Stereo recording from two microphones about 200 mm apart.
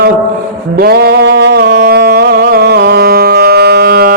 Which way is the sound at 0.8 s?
50° right (ahead or behind).